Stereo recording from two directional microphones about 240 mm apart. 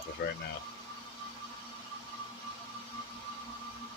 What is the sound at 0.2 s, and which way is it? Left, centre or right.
Speech, left.